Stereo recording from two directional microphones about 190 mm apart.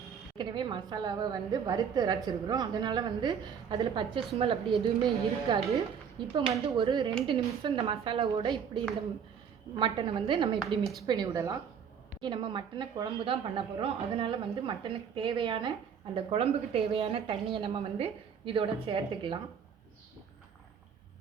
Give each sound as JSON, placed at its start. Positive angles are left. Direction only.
{"t": 0.3, "sound": "a woman's voice", "side_deg": -25}